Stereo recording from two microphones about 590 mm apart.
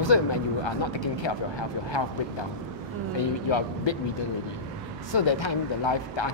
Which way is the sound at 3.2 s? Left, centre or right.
Left.